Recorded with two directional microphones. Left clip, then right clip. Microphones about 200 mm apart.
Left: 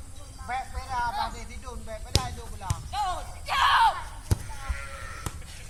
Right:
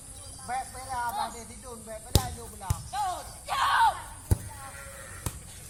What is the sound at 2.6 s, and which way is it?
Music, 20° right (ahead or behind).